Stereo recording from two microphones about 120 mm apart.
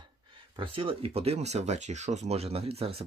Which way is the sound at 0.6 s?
45° right (ahead or behind).